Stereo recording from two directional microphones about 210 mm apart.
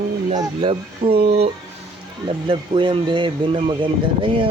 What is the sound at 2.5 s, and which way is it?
Speech, 25° right (ahead or behind).